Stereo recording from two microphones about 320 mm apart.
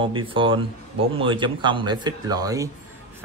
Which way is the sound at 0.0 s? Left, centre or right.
Centre.